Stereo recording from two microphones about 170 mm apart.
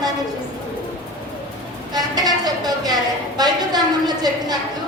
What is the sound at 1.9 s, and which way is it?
A woman's voice, 25° right (ahead or behind).